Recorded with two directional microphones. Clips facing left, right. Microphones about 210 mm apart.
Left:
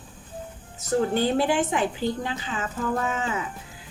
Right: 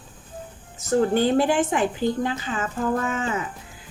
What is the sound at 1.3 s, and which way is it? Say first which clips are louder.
Speech: right 3 dB; 50° right (ahead or behind).